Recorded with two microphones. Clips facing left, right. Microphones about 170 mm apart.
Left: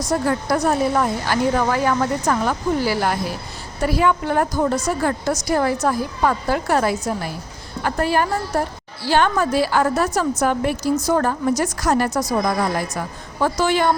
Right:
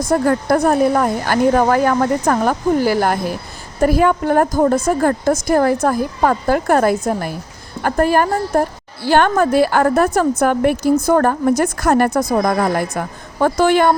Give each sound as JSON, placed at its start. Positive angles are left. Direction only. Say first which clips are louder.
{"t": 0.0, "sound": "a woman's voice", "louder": "right 5 dB", "side_deg": -55}